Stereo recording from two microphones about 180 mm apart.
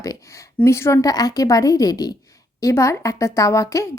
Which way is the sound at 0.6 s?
15° left (ahead or behind).